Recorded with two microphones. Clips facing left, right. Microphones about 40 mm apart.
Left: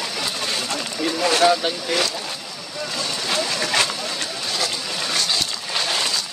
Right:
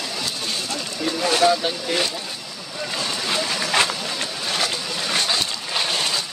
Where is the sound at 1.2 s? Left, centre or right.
Left.